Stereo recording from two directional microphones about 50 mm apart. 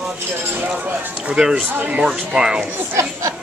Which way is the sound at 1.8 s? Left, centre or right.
Right.